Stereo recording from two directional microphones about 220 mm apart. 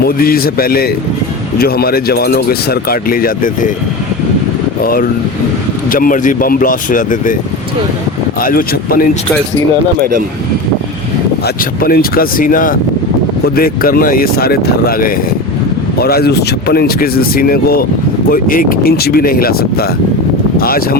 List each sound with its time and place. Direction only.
0.0 s speech: 45° left (ahead or behind)
4.8 s speech: 40° left (ahead or behind)
8.4 s speech: 40° left (ahead or behind)
10.0 s speech: 40° right (ahead or behind)
11.4 s speech: 45° left (ahead or behind)